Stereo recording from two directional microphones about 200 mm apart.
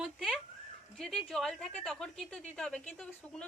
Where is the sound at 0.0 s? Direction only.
Centre (ahead or behind).